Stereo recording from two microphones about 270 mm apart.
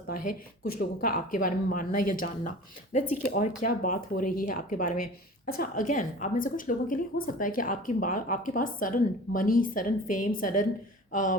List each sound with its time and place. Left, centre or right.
0.1 s speech: left
0.8 s a woman's voice: left